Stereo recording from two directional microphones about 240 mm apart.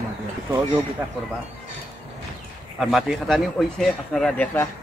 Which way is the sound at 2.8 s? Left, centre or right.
Centre.